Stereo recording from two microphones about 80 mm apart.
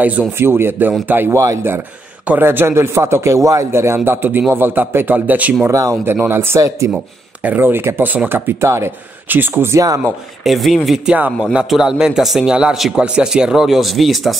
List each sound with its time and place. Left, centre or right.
0.0 s a man's voice: centre
0.4 s a man's voice: right
5.7 s speech: right
6.1 s a man's voice: right
10.4 s speech: centre
11.1 s a man's voice: right
11.7 s a man's voice: centre